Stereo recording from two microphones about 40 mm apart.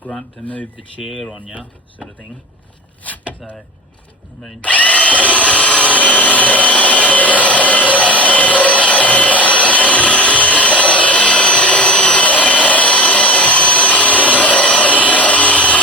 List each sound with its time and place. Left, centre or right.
0.4 s speech: left
0.8 s speech: centre
3.1 s speech: left
4.6 s drill: left